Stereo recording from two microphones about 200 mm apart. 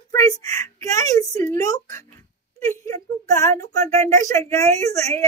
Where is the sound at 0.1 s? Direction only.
15° left (ahead or behind).